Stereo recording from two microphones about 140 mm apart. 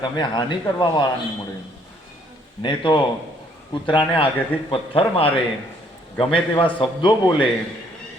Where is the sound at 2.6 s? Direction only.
35° left (ahead or behind).